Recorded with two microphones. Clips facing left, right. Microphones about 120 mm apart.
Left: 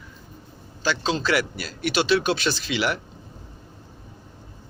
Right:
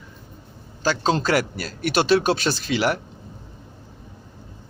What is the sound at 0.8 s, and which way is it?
Speech, 45° right (ahead or behind).